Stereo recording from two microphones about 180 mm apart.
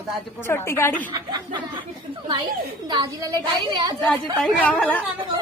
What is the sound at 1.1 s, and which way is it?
Speech, 25° right (ahead or behind).